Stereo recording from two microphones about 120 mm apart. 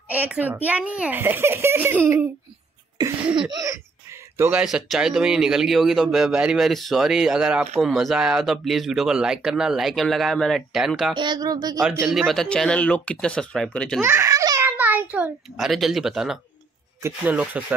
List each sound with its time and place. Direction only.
0.1 s a child's voice: 15° right (ahead or behind)
3.0 s a sound: 35° right (ahead or behind)
4.4 s a child's voice: 15° right (ahead or behind)
11.1 s speech: 35° right (ahead or behind)
12.1 s speech: centre (ahead or behind)
14.0 s baby laughter: 25° right (ahead or behind)
14.6 s a sound: 15° right (ahead or behind)
15.5 s a child's voice: centre (ahead or behind)